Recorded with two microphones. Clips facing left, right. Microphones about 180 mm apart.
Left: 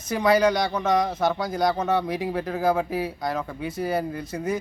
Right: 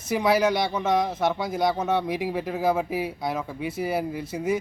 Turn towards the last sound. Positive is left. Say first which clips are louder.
# right 1 dB
turn(degrees=-5)  # may be behind; listen again after turning